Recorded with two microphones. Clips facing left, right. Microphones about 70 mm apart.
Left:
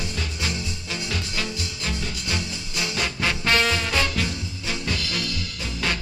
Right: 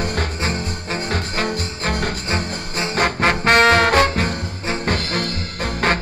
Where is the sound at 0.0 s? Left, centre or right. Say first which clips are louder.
Right 7 dB; right.